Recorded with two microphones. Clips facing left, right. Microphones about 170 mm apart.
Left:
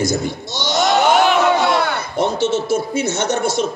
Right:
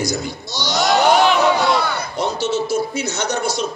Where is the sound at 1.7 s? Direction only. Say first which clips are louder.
Left 1 dB; 55° left (ahead or behind).